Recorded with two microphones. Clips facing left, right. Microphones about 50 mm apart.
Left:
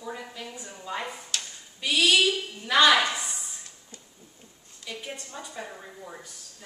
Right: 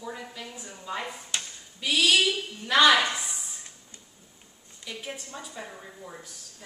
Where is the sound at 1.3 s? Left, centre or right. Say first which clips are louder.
Right 1 dB; right.